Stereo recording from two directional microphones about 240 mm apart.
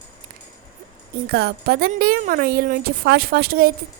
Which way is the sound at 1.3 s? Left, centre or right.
Right.